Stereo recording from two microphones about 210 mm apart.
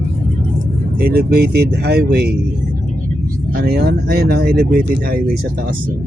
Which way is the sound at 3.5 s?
50° right (ahead or behind).